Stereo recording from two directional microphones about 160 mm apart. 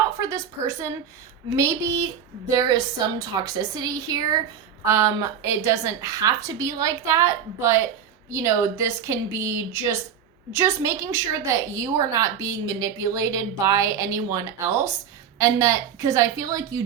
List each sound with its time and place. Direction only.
0.2 s a woman's voice: 20° right (ahead or behind)